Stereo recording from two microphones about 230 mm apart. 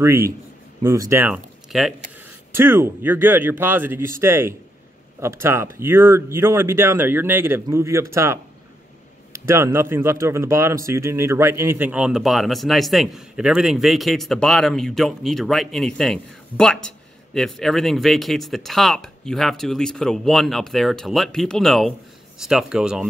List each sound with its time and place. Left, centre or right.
0.0 s speech: centre